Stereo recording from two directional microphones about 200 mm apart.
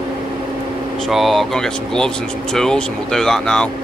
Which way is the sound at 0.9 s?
Centre (ahead or behind).